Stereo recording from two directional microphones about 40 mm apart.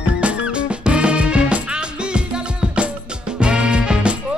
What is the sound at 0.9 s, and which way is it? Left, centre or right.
Music, right.